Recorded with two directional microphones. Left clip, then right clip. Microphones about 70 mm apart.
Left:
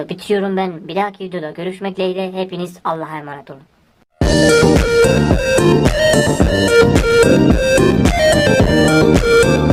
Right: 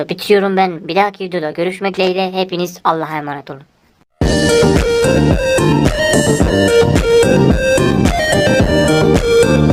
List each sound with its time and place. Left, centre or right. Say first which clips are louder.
0.0 s a woman's voice: right 6 dB; right
2.1 s a woman's voice: right 5 dB; right
4.2 s music: left 1 dB; centre